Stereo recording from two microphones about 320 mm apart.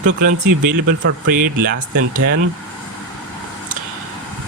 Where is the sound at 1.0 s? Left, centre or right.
Right.